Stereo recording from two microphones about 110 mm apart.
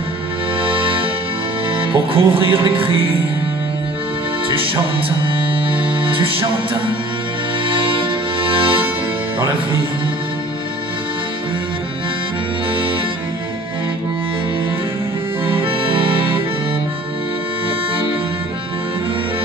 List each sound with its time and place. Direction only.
0.6 s music: 55° right (ahead or behind)
5.2 s music: 55° right (ahead or behind)
15.4 s accordion: 55° right (ahead or behind)